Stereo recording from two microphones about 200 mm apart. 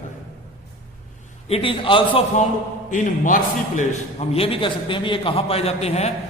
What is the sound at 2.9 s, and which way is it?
A man's voice, 40° left (ahead or behind).